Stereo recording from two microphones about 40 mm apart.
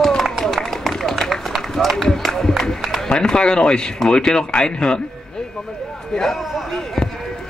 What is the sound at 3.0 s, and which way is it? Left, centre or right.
Speech, centre.